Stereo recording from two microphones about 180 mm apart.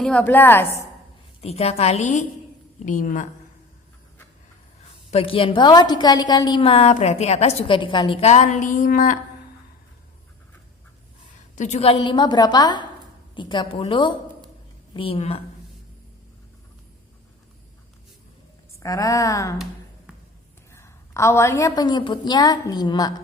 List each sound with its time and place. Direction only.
0.0 s a woman's voice: 5° left (ahead or behind)
1.4 s a woman's voice: 35° left (ahead or behind)
2.8 s a sound: 45° left (ahead or behind)
5.1 s a woman's voice: 30° left (ahead or behind)
8.2 s a sound: 40° left (ahead or behind)
11.5 s a woman's voice: 40° left (ahead or behind)
18.7 s a woman's voice: 20° left (ahead or behind)
20.7 s a woman's voice: 15° left (ahead or behind)